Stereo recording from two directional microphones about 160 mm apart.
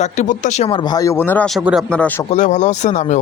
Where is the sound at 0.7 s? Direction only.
30° left (ahead or behind); by 1.5 s 10° left (ahead or behind).